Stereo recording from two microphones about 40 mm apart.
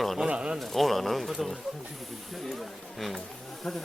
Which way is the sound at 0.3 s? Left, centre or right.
Right.